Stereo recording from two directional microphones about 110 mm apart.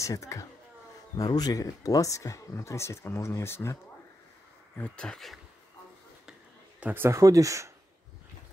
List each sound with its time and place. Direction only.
0.0 s speech: 30° left (ahead or behind)
4.7 s speech: 10° left (ahead or behind)
6.8 s speech: 20° right (ahead or behind)